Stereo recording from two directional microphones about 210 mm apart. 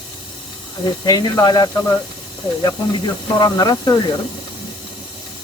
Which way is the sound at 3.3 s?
20° left (ahead or behind).